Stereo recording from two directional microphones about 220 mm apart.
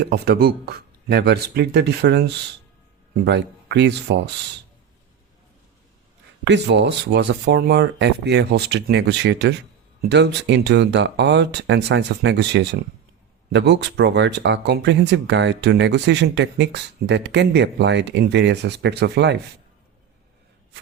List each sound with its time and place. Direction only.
0.1 s speech: 45° right (ahead or behind)
6.4 s speech: 55° right (ahead or behind)